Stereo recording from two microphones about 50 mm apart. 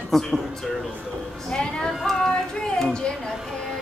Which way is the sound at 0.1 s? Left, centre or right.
Centre.